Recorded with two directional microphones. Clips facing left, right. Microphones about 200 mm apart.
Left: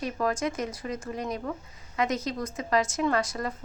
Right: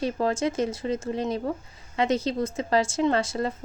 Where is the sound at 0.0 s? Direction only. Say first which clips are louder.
Right 3 dB; 30° right (ahead or behind).